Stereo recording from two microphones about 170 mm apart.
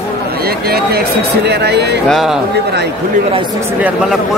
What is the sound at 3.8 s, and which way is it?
Speech, centre (ahead or behind).